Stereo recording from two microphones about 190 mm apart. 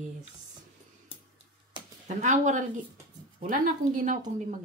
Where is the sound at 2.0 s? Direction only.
40° right (ahead or behind).